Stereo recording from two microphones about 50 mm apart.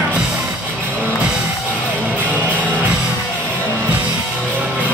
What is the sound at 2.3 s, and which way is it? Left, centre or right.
Music, right.